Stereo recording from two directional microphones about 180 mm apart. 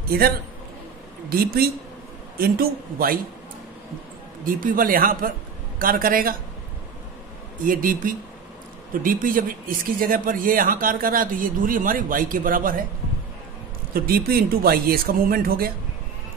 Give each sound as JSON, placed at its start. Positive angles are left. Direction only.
{"t": 0.1, "sound": "speech", "side_deg": -55}
{"t": 1.3, "sound": "speech", "side_deg": -55}
{"t": 4.5, "sound": "a man's voice", "side_deg": -50}
{"t": 7.6, "sound": "a man's voice", "side_deg": -50}
{"t": 13.9, "sound": "speech", "side_deg": -55}